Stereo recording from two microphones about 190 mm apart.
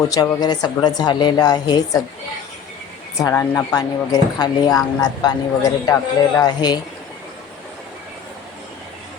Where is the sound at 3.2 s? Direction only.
15° left (ahead or behind).